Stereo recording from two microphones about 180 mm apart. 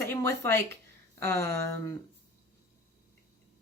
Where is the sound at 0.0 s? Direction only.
15° left (ahead or behind).